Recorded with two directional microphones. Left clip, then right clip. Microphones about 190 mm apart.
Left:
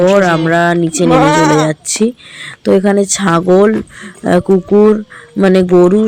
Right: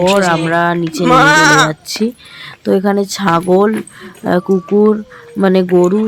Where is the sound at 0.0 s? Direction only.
15° left (ahead or behind).